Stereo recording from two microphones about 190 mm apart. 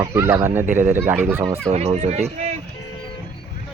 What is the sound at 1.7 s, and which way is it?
Speech, 35° right (ahead or behind).